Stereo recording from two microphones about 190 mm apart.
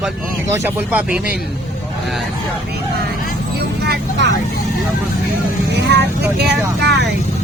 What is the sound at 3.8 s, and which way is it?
Vehicle, 65° right (ahead or behind).